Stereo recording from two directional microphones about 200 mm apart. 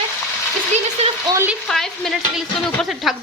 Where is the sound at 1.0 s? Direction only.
30° right (ahead or behind).